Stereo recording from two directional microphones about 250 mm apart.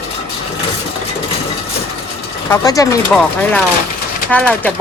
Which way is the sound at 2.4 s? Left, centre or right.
Centre.